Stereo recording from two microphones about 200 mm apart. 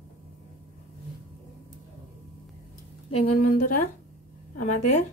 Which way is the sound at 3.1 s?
40° left (ahead or behind).